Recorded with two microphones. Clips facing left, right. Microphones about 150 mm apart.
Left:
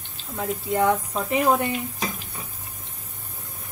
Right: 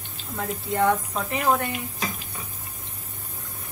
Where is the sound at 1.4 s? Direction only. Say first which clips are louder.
Left 1 dB; 15° left (ahead or behind).